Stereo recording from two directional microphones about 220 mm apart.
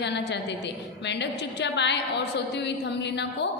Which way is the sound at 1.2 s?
50° left (ahead or behind).